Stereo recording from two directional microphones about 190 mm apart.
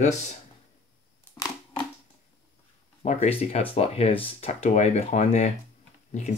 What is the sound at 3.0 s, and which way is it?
Speech, 35° left (ahead or behind).